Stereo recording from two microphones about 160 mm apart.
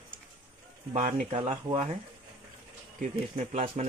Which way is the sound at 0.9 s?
45° right (ahead or behind).